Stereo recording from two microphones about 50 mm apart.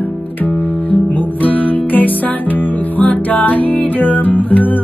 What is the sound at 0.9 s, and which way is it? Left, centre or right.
Music, left.